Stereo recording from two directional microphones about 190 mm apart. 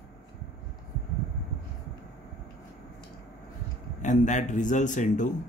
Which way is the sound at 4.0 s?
40° left (ahead or behind).